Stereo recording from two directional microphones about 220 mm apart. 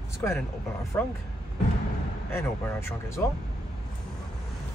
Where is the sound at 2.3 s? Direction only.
10° left (ahead or behind).